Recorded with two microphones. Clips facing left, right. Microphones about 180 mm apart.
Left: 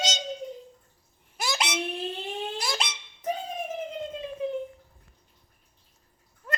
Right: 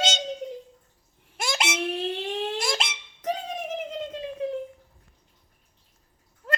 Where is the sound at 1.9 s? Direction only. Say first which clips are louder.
Right 4 dB; 75° right (ahead or behind).